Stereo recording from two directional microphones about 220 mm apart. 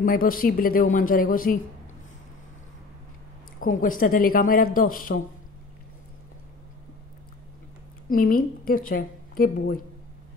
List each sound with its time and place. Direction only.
0.0 s a woman's voice: 40° left (ahead or behind)
3.6 s a woman's voice: 40° left (ahead or behind)
8.1 s a woman's voice: 40° left (ahead or behind)